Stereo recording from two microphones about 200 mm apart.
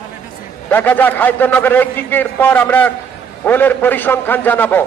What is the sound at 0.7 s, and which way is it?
A man's voice, 10° left (ahead or behind).